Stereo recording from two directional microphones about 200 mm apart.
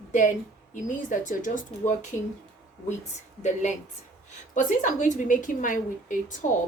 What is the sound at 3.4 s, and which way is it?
A woman's voice, 35° left (ahead or behind).